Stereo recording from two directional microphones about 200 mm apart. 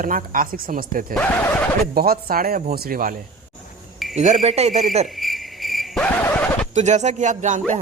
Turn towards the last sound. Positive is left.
turn(degrees=-40)  # may be behind; listen again after turning